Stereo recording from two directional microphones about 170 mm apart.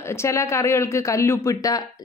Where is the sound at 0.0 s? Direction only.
15° left (ahead or behind).